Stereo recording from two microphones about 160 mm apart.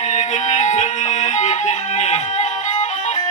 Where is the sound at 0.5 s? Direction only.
50° left (ahead or behind).